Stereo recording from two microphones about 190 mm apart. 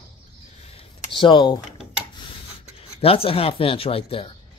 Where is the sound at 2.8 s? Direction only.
30° left (ahead or behind).